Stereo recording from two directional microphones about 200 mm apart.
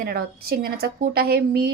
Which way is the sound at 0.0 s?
50° right (ahead or behind).